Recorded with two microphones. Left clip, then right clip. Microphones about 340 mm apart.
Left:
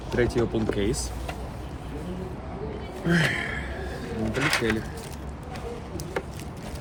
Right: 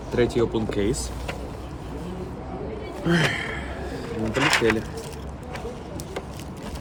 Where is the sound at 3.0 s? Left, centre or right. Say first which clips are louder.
Right 2 dB; centre.